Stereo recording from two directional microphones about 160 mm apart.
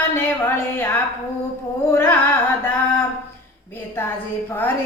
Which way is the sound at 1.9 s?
15° left (ahead or behind).